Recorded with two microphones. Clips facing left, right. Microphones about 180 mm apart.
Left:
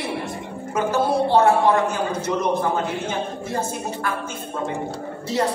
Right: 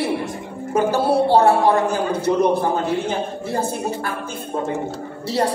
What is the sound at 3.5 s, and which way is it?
Speech, 35° right (ahead or behind).